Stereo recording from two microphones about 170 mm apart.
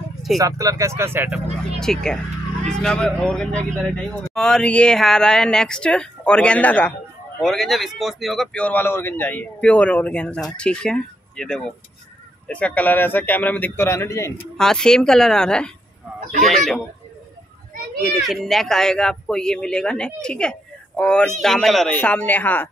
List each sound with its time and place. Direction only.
0.4 s speech: 20° right (ahead or behind)
1.8 s a man's voice: 5° left (ahead or behind)
18.2 s speech: centre (ahead or behind)